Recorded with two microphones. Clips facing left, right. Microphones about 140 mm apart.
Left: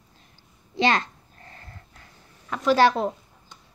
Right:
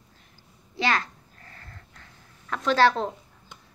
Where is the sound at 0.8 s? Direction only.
20° left (ahead or behind).